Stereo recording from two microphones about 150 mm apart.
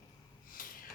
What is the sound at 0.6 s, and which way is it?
Snort, 65° left (ahead or behind).